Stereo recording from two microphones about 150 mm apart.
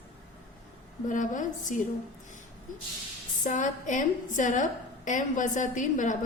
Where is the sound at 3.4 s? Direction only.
60° left (ahead or behind).